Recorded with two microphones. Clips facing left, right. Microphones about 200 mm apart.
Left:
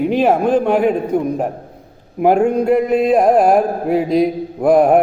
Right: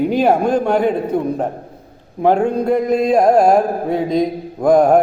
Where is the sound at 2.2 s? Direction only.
10° left (ahead or behind).